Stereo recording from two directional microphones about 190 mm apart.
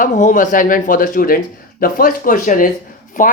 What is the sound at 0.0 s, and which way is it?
Speech, 40° left (ahead or behind).